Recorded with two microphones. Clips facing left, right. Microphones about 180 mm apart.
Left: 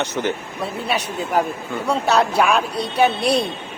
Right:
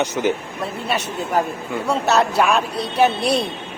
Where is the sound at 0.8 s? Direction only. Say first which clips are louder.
Even; centre (ahead or behind).